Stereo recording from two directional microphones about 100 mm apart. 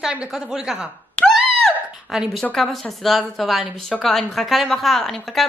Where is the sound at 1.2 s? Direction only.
10° left (ahead or behind).